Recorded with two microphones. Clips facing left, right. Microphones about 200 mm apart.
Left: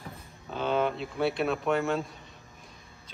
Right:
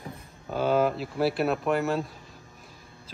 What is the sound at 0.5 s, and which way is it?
Speech, 5° right (ahead or behind).